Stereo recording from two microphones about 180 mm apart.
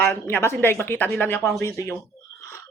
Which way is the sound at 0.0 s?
10° left (ahead or behind).